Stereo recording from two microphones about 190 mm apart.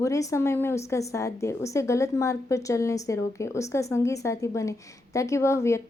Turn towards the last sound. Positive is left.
turn(degrees=15)  # may be behind; listen again after turning